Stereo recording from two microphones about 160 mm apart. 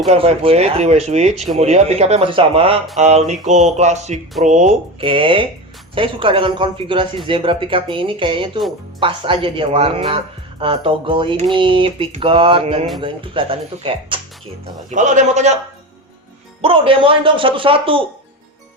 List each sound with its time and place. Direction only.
0.1 s speech: 40° right (ahead or behind)
3.0 s speech: 45° right (ahead or behind)
4.9 s speech: 35° right (ahead or behind)
14.6 s speech: 45° right (ahead or behind)
16.6 s speech: 35° right (ahead or behind)